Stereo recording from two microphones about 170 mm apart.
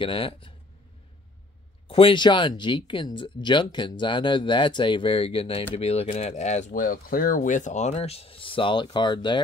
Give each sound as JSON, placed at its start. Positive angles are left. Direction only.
{"t": 0.0, "sound": "speech", "side_deg": 30}
{"t": 1.9, "sound": "speech", "side_deg": 30}